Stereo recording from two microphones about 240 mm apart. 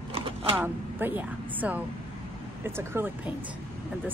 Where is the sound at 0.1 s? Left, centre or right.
Right.